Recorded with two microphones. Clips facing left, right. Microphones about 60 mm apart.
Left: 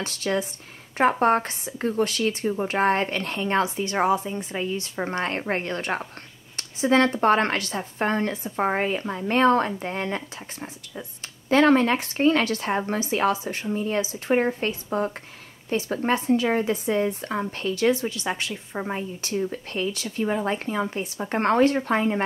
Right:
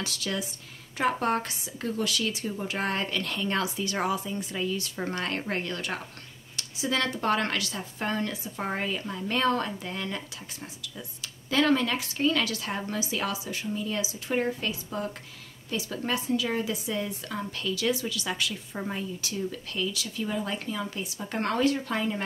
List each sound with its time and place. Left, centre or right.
0.0 s a woman's voice: left